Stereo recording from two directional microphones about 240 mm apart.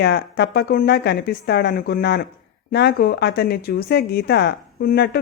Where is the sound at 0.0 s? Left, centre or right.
Left.